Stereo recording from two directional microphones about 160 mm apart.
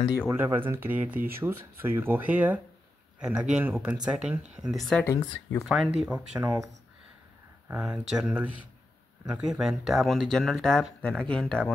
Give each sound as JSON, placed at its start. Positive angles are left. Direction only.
{"t": 0.3, "sound": "speech", "side_deg": -15}
{"t": 5.0, "sound": "speech", "side_deg": 20}
{"t": 5.7, "sound": "speech", "side_deg": 0}
{"t": 8.1, "sound": "speech", "side_deg": -5}